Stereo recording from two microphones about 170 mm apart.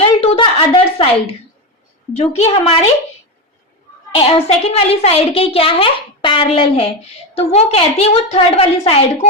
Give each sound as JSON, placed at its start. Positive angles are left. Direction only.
{"t": 0.0, "sound": "a sound", "side_deg": 35}
{"t": 2.1, "sound": "a woman's voice", "side_deg": 40}
{"t": 4.2, "sound": "a woman's voice", "side_deg": 35}